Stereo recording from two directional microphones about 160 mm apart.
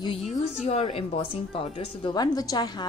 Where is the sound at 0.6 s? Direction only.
40° left (ahead or behind).